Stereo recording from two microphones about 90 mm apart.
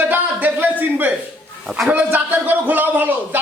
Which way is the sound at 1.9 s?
20° right (ahead or behind).